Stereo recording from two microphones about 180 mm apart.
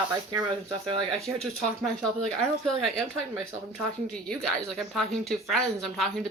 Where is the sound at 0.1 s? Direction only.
20° right (ahead or behind).